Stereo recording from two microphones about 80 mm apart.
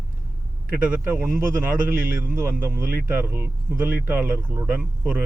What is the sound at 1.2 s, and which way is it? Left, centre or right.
A man's voice, right.